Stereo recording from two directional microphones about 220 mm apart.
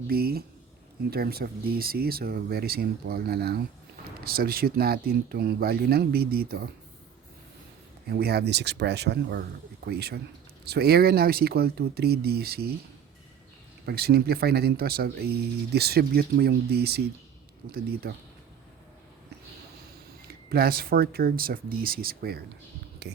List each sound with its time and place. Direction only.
0.1 s speech: 45° right (ahead or behind)
8.0 s speech: 45° right (ahead or behind)
13.8 s speech: 45° right (ahead or behind)
20.2 s speech: 45° right (ahead or behind)